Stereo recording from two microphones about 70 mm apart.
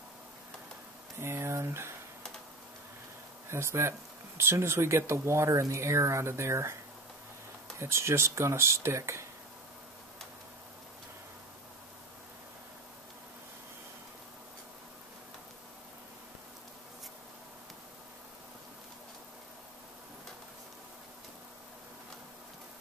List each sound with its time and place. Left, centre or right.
1.2 s speech: right
3.4 s speech: right
7.8 s speech: right